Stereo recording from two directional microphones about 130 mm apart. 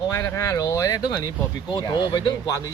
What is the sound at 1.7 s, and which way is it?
Speech, 35° left (ahead or behind).